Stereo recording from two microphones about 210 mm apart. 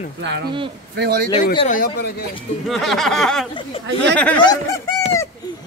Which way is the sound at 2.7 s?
Centre (ahead or behind).